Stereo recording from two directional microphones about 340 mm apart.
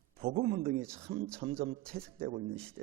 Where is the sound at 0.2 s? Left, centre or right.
Right.